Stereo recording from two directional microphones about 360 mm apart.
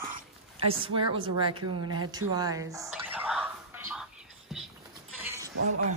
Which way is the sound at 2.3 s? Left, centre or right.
Centre.